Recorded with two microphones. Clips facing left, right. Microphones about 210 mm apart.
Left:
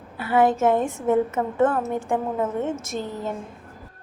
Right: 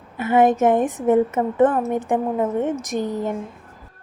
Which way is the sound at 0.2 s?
20° right (ahead or behind).